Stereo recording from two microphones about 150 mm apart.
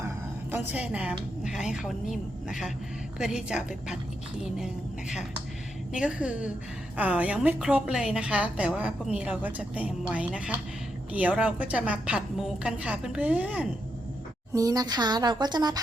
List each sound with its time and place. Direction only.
0.5 s a woman's voice: 10° right (ahead or behind)
14.5 s speech: 20° right (ahead or behind)